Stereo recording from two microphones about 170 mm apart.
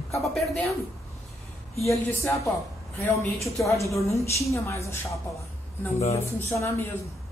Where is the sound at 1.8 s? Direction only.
15° left (ahead or behind).